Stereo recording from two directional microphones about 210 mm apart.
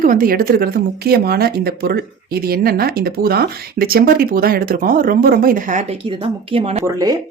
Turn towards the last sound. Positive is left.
turn(degrees=-15)  # may be behind; listen again after turning